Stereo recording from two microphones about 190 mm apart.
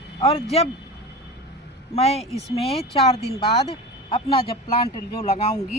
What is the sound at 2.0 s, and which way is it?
Speech, 35° left (ahead or behind).